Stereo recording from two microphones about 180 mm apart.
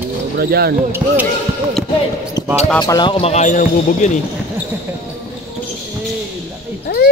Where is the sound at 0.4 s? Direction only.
60° right (ahead or behind).